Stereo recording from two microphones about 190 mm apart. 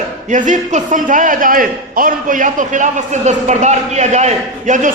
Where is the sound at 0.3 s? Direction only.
40° right (ahead or behind).